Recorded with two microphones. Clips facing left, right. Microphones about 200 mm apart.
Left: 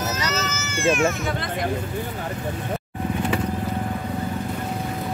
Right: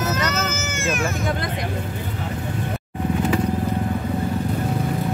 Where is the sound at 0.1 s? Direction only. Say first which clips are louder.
Right 3 dB; 55° right (ahead or behind).